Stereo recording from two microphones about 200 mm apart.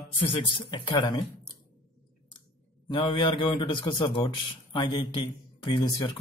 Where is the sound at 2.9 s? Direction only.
25° left (ahead or behind).